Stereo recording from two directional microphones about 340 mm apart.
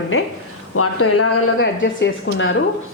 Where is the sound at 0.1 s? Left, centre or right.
Left.